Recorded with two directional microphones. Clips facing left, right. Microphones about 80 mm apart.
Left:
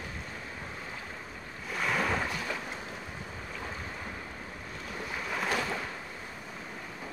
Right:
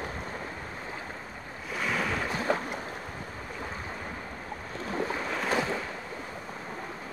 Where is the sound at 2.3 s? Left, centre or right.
Right.